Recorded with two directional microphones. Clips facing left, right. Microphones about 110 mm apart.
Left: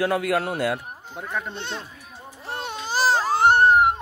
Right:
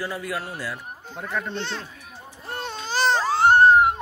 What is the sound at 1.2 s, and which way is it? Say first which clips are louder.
Speech: right 2 dB; 10° left (ahead or behind).